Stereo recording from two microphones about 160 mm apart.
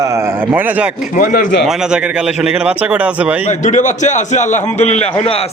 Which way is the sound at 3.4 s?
50° left (ahead or behind).